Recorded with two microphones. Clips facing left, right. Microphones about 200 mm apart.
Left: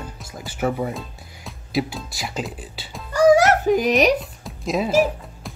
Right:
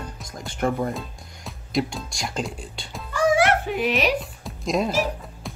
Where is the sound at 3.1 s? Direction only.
40° left (ahead or behind).